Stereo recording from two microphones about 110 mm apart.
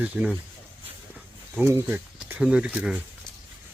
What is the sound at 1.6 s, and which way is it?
Speech, 25° right (ahead or behind).